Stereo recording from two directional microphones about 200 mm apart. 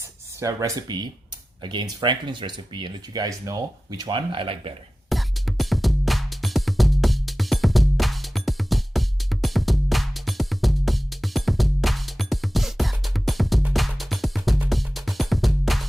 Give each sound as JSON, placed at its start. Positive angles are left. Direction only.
{"t": 0.3, "sound": "speech", "side_deg": -15}
{"t": 5.0, "sound": "music", "side_deg": 0}